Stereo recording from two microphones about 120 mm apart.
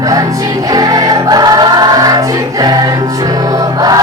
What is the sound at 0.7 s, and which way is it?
Music, 30° right (ahead or behind).